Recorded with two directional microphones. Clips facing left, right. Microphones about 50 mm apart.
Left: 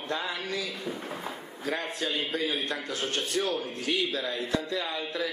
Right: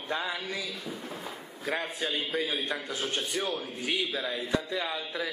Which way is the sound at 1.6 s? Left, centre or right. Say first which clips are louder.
Left 1 dB; centre.